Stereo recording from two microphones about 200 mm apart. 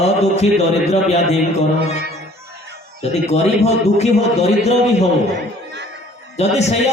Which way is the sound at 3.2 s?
30° left (ahead or behind).